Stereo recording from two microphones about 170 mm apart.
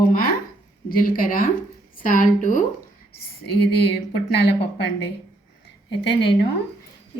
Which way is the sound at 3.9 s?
75° left (ahead or behind).